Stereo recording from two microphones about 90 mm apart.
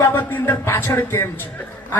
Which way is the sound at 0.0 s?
25° left (ahead or behind).